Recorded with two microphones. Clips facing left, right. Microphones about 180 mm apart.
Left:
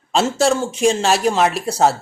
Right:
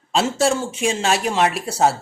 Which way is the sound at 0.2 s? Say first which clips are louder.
Left 2 dB; centre (ahead or behind).